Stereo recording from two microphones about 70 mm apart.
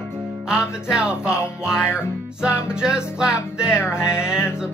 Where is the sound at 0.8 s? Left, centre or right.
Centre.